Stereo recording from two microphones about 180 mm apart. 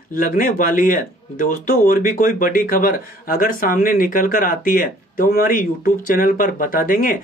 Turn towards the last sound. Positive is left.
turn(degrees=50)  # may be behind; listen again after turning